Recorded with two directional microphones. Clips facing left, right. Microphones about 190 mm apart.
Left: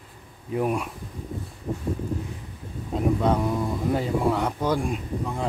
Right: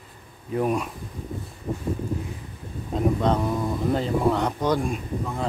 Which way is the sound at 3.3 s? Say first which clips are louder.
Even; 5° left (ahead or behind).